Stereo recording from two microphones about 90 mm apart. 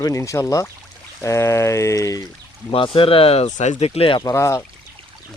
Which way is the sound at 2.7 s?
80° left.